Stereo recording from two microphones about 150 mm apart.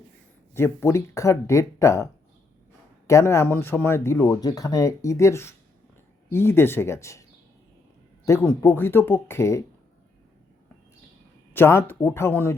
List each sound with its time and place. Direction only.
0.5 s speech: 15° left (ahead or behind)
3.1 s speech: 20° left (ahead or behind)
11.5 s speech: 15° left (ahead or behind)